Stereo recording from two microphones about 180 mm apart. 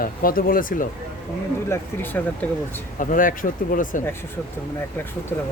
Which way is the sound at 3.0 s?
50° left (ahead or behind).